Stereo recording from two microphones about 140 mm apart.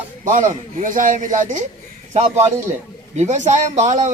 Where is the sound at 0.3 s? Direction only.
65° right (ahead or behind).